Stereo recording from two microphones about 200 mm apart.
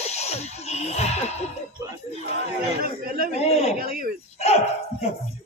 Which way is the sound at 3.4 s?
30° left (ahead or behind).